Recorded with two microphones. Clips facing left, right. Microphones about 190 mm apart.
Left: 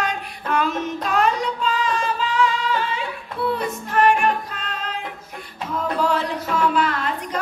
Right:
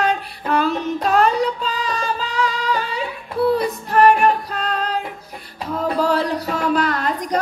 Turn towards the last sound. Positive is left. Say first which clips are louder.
# right 3 dB
turn(degrees=-40)  # may be behind; listen again after turning